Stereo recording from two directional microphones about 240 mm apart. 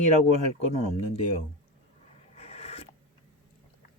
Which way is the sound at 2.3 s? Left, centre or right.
Left.